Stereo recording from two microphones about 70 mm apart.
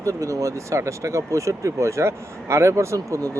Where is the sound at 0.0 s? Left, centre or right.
Right.